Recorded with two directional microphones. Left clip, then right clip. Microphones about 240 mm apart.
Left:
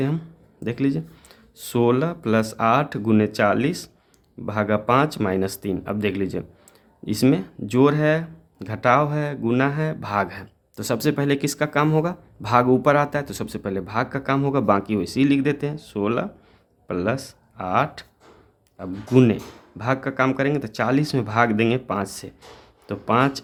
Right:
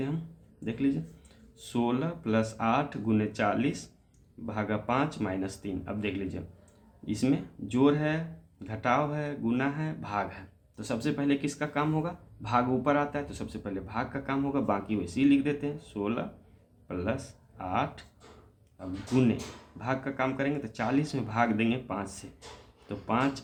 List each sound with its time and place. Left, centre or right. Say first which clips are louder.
0.6 s speech: left 7 dB; left